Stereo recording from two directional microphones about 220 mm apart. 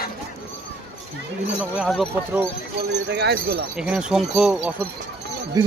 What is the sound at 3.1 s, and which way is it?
Speech, 50° right (ahead or behind).